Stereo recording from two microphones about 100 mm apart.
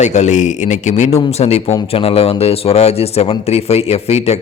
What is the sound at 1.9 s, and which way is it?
Speech, 75° left (ahead or behind).